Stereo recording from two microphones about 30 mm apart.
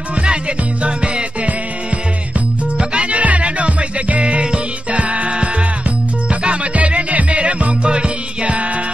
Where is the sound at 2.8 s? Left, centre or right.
Right.